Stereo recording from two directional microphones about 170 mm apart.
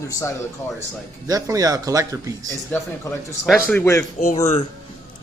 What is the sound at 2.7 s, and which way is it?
Speech, 10° left (ahead or behind).